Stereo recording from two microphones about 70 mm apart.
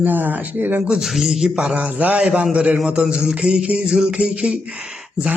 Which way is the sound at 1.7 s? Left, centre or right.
Right.